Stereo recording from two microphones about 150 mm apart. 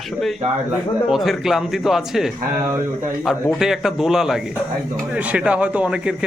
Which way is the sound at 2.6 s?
20° right (ahead or behind).